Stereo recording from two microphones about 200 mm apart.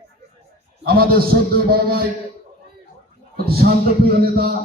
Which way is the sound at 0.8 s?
50° right (ahead or behind).